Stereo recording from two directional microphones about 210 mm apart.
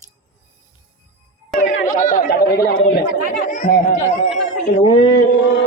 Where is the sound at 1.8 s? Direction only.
40° left (ahead or behind).